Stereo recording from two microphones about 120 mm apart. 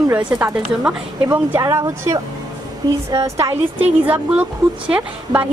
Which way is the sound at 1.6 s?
25° right (ahead or behind).